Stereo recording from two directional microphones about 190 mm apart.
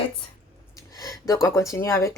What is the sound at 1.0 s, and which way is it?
Speech, 20° left (ahead or behind).